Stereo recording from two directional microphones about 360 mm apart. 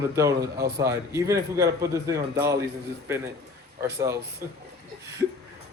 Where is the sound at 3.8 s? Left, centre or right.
Centre.